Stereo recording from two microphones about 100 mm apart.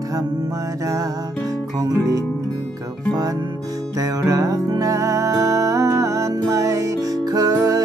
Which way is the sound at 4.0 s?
35° right (ahead or behind).